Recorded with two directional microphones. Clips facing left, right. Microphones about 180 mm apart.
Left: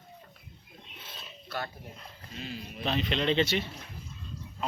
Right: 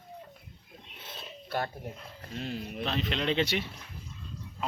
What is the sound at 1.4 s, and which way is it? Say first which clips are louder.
Dog: right 4 dB; 45° right (ahead or behind).